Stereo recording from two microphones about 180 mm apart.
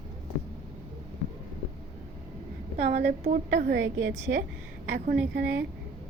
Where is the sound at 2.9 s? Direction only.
55° right (ahead or behind); by 4.1 s 90° right.